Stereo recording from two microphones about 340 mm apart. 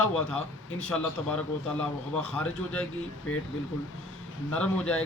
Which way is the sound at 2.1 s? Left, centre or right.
Centre.